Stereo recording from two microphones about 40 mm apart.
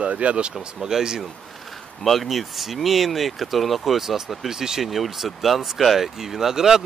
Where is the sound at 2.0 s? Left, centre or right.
Centre.